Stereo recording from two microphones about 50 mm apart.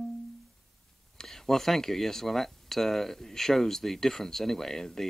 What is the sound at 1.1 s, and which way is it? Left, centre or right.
Speech, centre.